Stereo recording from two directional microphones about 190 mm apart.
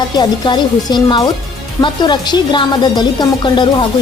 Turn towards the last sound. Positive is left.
turn(degrees=25)  # may be behind; listen again after turning